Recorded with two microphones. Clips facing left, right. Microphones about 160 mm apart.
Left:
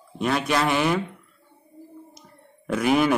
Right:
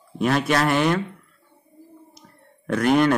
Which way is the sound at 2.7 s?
5° left (ahead or behind).